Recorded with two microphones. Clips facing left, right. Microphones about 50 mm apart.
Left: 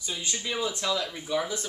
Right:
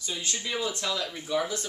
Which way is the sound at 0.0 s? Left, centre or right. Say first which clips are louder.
Even; centre.